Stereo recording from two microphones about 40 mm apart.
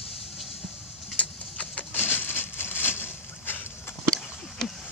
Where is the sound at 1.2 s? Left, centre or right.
Left.